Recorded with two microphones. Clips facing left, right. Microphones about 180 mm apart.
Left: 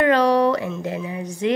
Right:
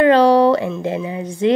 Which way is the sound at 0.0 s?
30° right (ahead or behind).